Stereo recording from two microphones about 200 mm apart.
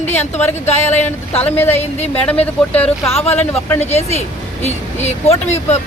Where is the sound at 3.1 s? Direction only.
30° left (ahead or behind).